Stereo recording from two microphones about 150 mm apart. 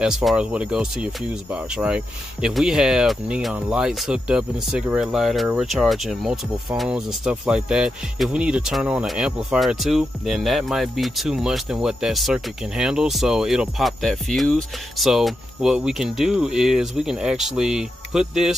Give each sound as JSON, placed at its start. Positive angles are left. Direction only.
{"t": 0.0, "sound": "speech", "side_deg": 0}